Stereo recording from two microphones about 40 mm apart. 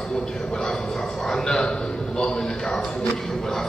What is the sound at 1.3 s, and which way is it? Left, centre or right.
Speech, centre.